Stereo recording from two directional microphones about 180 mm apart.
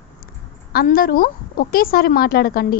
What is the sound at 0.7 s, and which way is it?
A woman's voice, 55° left (ahead or behind).